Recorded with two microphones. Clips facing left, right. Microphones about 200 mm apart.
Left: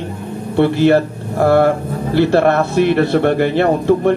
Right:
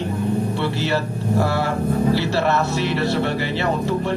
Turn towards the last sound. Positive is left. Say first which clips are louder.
# left 8 dB
turn(degrees=55)  # may be behind; listen again after turning